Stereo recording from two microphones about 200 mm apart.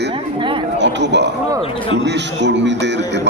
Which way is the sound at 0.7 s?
60° right (ahead or behind).